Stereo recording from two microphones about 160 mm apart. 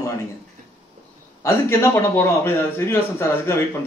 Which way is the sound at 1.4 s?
15° left (ahead or behind).